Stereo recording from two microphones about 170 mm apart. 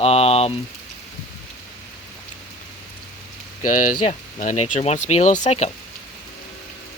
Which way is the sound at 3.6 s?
50° left (ahead or behind).